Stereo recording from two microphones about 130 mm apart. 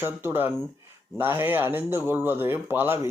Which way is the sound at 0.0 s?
20° right (ahead or behind).